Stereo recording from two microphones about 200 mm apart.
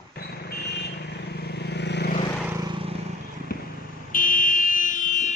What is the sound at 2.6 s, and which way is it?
Vehicle, 25° right (ahead or behind).